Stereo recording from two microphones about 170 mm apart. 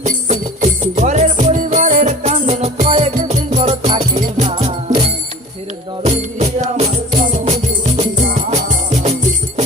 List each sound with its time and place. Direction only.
0.0 s music: 45° right (ahead or behind)
3.2 s music: 55° right (ahead or behind)
3.6 s music: 35° right (ahead or behind)